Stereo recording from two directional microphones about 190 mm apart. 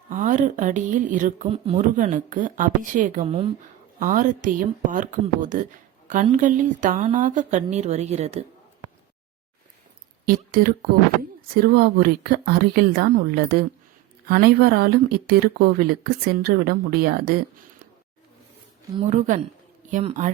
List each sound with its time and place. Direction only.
0.1 s speech: 45° right (ahead or behind)
1.5 s speech: 30° right (ahead or behind)
2.0 s speech: 40° right (ahead or behind)
3.2 s speech: 30° right (ahead or behind)
3.6 s a woman's voice: 45° right (ahead or behind)
10.2 s speech: 50° right (ahead or behind)
19.1 s a woman's voice: 40° right (ahead or behind)